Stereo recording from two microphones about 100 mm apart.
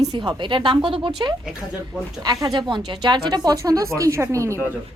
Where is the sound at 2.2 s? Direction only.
45° right (ahead or behind).